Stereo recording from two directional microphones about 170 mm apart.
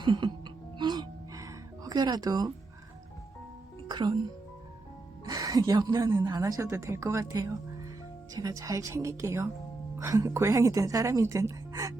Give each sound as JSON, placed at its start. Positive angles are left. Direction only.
{"t": 0.0, "sound": "music", "side_deg": -25}
{"t": 3.8, "sound": "music", "side_deg": -25}
{"t": 5.3, "sound": "a woman's voice", "side_deg": -20}